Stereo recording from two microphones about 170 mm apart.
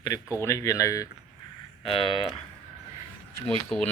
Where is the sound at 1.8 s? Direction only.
30° left (ahead or behind).